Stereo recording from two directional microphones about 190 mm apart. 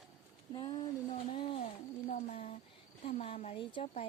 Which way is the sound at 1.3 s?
30° left (ahead or behind).